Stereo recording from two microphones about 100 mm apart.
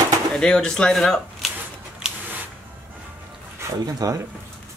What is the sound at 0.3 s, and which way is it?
Speech, 10° left (ahead or behind).